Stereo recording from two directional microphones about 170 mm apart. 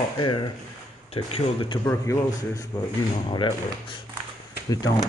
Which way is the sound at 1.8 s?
20° left (ahead or behind).